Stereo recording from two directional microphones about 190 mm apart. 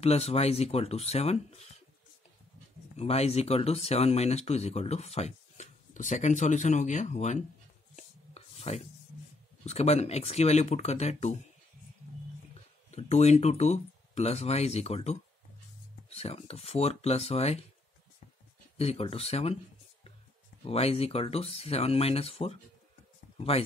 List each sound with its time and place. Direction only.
0.0 s speech: 35° left (ahead or behind)
3.0 s speech: 30° left (ahead or behind)
7.9 s chopping: 35° left (ahead or behind)
9.7 s speech: 35° left (ahead or behind)
12.9 s speech: 35° left (ahead or behind)
18.8 s speech: 30° left (ahead or behind)